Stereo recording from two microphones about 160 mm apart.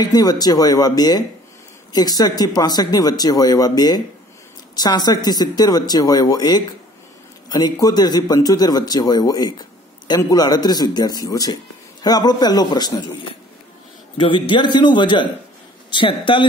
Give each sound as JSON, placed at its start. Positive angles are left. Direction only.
{"t": 0.0, "sound": "speech", "side_deg": 25}
{"t": 14.1, "sound": "a man's voice", "side_deg": 30}